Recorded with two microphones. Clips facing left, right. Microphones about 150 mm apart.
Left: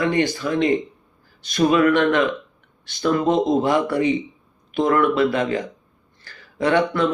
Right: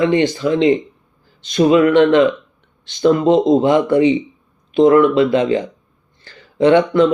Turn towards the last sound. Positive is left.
turn(degrees=-20)  # may be behind; listen again after turning